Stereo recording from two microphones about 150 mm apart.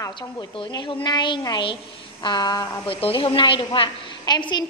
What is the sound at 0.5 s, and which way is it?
A woman's voice, 35° left (ahead or behind).